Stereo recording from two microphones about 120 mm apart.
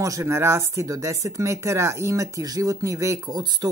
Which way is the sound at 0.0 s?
25° right (ahead or behind).